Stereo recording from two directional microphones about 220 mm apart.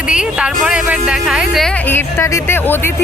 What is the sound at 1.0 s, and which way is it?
Speech, 5° right (ahead or behind).